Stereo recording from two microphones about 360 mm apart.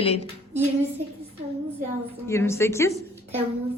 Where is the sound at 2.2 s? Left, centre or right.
Centre.